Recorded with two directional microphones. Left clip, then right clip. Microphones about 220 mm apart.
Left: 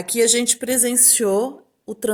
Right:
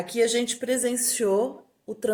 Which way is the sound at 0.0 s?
50° left (ahead or behind).